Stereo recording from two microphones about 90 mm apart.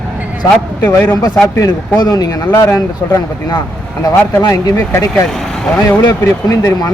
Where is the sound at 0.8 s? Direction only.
20° left (ahead or behind).